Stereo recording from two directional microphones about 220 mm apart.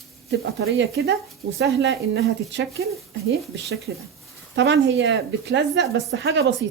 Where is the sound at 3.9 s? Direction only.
60° right (ahead or behind).